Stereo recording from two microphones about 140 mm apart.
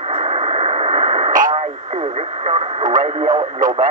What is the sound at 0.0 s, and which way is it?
Radio, 45° right (ahead or behind).